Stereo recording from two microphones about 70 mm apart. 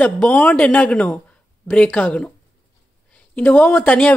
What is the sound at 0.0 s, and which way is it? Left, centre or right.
Speech, left.